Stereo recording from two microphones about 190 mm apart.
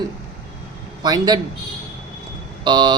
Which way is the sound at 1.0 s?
20° right (ahead or behind).